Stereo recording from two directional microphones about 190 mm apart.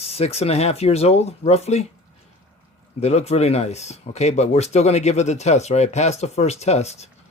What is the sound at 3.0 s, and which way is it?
Speech, 35° left (ahead or behind).